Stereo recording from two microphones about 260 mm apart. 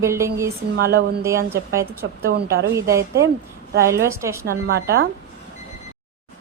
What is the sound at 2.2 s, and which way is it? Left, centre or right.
Speech, right.